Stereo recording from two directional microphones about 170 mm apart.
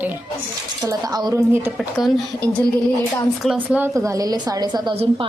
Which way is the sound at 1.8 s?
Centre (ahead or behind).